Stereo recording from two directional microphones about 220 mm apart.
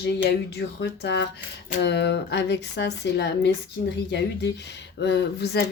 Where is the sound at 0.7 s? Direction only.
50° left (ahead or behind).